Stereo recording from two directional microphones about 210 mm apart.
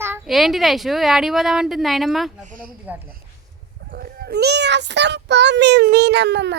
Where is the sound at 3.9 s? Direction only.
45° right (ahead or behind).